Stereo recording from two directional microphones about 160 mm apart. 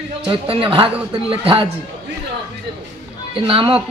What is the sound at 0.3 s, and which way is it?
Music, 30° right (ahead or behind).